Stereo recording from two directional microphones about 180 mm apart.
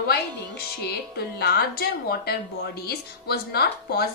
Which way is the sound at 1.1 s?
60° left (ahead or behind).